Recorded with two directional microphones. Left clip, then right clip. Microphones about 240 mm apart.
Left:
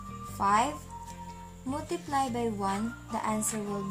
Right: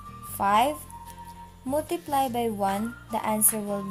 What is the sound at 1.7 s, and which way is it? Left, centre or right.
A woman's voice, right.